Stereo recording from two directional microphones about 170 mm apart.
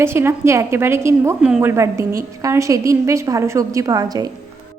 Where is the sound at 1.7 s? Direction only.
15° right (ahead or behind).